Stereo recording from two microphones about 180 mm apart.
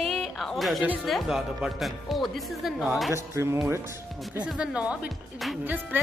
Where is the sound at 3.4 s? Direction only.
15° right (ahead or behind).